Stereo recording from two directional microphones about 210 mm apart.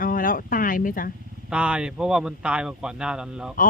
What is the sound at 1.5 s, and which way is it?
Speech, 5° right (ahead or behind).